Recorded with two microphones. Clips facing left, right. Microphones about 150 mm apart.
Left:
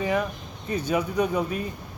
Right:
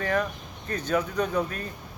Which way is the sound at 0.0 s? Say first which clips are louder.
Left 1 dB; 10° left (ahead or behind).